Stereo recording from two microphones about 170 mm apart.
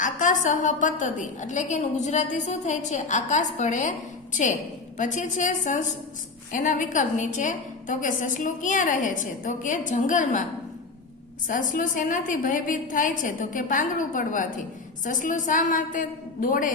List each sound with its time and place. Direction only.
0.0 s a woman's voice: 50° left (ahead or behind)
11.4 s a woman's voice: 50° left (ahead or behind)